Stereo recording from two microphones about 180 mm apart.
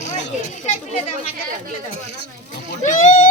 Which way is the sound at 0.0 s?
40° left (ahead or behind).